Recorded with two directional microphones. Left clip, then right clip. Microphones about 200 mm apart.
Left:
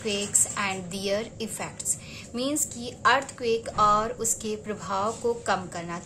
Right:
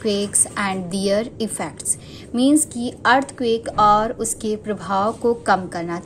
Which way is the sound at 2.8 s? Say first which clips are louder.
Right 2 dB; 15° right (ahead or behind).